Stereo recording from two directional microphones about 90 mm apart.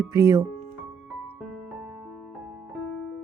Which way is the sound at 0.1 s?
40° right (ahead or behind).